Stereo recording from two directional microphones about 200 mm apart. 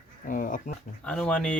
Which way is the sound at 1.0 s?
5° left (ahead or behind).